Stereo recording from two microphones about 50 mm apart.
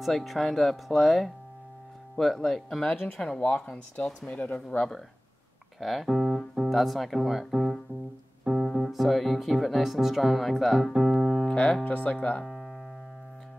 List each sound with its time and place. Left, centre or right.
0.0 s speech: centre
3.4 s speech: left
4.6 s speech: centre
5.8 s speech: centre
10.9 s keyboard: centre
11.8 s speech: left
12.4 s music: centre